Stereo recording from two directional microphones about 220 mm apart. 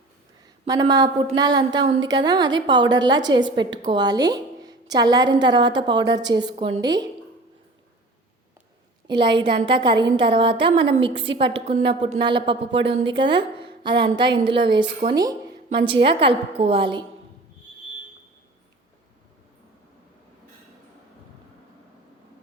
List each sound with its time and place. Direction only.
0.7 s a woman's voice: 15° right (ahead or behind)
9.0 s a woman's voice: 20° right (ahead or behind)